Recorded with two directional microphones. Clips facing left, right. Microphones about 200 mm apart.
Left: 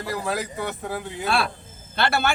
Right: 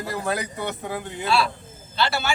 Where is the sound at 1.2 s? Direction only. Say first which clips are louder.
Right 2 dB; 55° left (ahead or behind).